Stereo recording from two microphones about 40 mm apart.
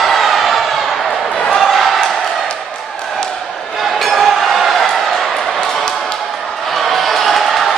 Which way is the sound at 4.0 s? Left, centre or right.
Centre.